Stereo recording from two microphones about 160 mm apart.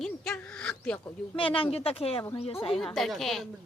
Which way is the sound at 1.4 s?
35° left (ahead or behind).